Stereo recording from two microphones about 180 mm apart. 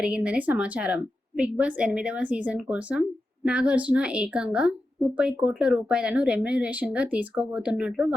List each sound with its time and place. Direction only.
0.0 s a woman's voice: 5° right (ahead or behind)